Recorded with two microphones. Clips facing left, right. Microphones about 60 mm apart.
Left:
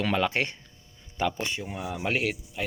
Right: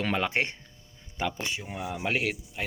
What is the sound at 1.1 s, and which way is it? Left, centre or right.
Speech, centre.